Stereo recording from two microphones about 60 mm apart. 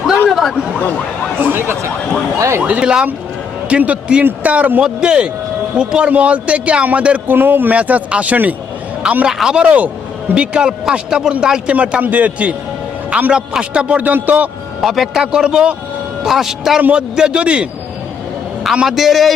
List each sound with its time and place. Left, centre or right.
0.3 s a sound: centre
1.4 s a sound: right
2.6 s a man's voice: centre
4.8 s a man's voice: centre
7.3 s speech: right
7.8 s a man's voice: right
13.3 s a man's voice: centre
14.0 s a man's voice: right
14.8 s a man's voice: centre
18.6 s a man's voice: centre